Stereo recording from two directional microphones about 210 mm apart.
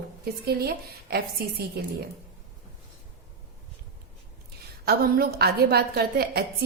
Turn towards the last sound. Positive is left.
turn(degrees=-50)  # may be behind; listen again after turning